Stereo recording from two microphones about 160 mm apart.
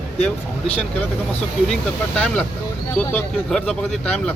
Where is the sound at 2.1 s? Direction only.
5° left (ahead or behind).